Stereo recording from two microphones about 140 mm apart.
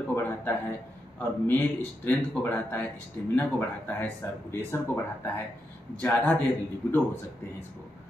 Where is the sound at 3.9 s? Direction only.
10° left (ahead or behind).